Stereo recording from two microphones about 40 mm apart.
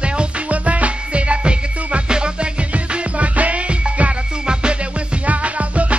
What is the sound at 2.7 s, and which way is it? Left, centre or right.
Music, right.